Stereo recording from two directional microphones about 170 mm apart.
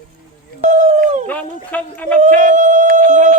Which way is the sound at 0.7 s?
45° right (ahead or behind).